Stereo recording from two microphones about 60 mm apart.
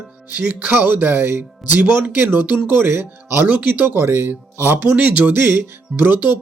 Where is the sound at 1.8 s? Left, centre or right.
Right.